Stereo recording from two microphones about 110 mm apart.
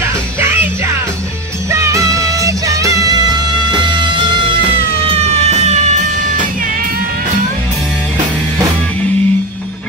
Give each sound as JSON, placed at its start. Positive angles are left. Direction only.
{"t": 0.0, "sound": "music", "side_deg": -20}
{"t": 1.7, "sound": "music", "side_deg": -25}
{"t": 5.0, "sound": "music", "side_deg": -70}